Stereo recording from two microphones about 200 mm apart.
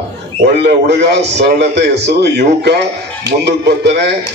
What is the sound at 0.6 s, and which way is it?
A man's voice, 55° right (ahead or behind).